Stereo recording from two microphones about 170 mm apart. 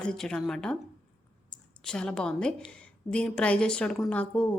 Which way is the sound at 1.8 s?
5° left (ahead or behind).